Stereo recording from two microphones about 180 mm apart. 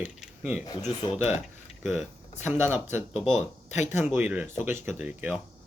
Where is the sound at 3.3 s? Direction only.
40° left (ahead or behind).